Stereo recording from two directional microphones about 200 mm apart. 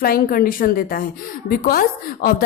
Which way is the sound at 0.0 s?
45° left (ahead or behind).